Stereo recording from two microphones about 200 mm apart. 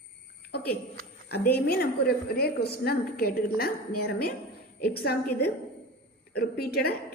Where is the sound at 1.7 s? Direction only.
50° left (ahead or behind).